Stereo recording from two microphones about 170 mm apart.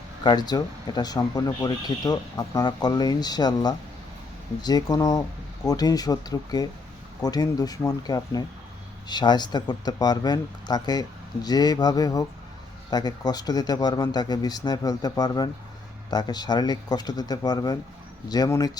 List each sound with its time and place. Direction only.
0.2 s speech: 25° left (ahead or behind)